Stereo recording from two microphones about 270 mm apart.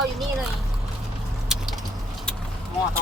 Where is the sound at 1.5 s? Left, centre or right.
Centre.